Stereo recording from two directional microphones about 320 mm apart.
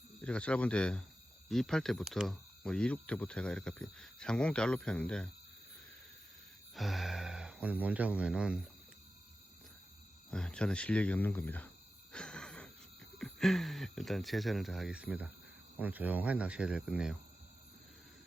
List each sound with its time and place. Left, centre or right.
0.2 s speech: centre
6.7 s speech: centre
10.3 s speech: centre
12.1 s wheeze: centre
13.1 s speech: centre